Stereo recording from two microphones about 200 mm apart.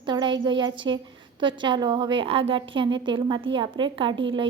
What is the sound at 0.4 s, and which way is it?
A woman's voice, 20° right (ahead or behind).